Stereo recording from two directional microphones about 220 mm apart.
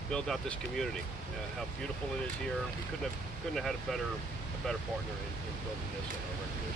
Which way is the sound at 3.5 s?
Centre (ahead or behind).